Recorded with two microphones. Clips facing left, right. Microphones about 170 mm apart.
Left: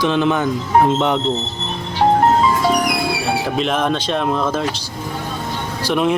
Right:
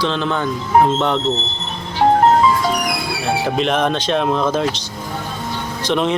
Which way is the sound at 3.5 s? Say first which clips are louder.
Right 1 dB; centre (ahead or behind).